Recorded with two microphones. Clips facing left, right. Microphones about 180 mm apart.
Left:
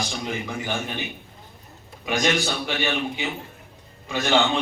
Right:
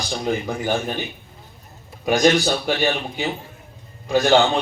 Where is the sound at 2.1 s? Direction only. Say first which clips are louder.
Right 7 dB; 40° right (ahead or behind).